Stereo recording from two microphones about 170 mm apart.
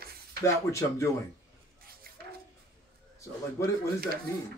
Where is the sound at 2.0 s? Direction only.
60° right (ahead or behind).